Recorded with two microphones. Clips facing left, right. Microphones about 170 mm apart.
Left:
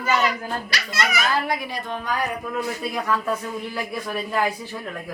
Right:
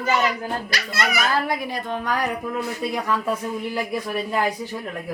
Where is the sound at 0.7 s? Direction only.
55° right (ahead or behind).